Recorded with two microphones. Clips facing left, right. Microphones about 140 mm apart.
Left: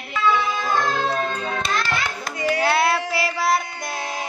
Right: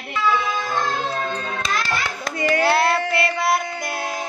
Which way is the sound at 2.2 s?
70° right (ahead or behind).